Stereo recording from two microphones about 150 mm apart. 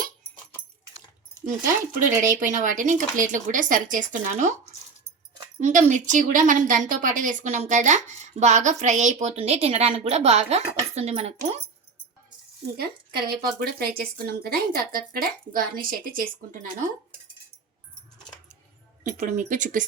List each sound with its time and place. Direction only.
1.6 s speech: 60° right (ahead or behind)
5.5 s a woman's voice: 55° right (ahead or behind)
12.7 s a woman's voice: 90° right; by 16.6 s 70° right (ahead or behind)
19.0 s speech: 55° right (ahead or behind)